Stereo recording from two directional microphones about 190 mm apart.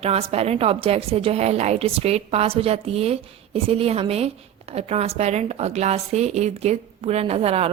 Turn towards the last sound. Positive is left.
turn(degrees=-30)  # may be behind; listen again after turning